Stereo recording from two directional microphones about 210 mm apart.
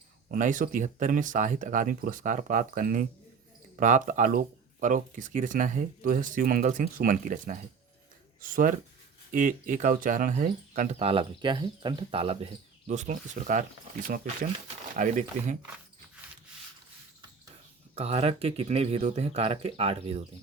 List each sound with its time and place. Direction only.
0.3 s speech: 40° right (ahead or behind)
11.0 s speech: 25° right (ahead or behind)
17.9 s speech: 30° right (ahead or behind)